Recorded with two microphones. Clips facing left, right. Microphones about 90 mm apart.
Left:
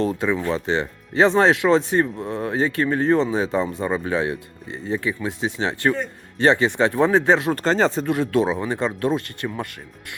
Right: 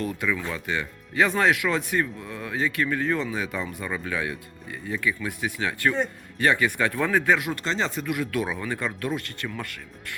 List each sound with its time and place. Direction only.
0.0 s speech: 30° left (ahead or behind)